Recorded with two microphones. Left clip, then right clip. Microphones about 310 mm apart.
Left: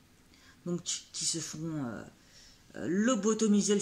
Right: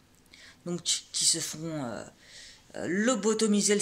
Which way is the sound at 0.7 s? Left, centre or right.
Centre.